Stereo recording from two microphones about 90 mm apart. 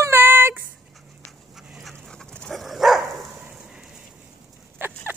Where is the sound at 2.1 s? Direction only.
10° left (ahead or behind).